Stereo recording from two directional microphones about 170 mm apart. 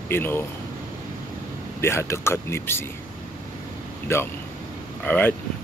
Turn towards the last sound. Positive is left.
turn(degrees=10)  # may be behind; listen again after turning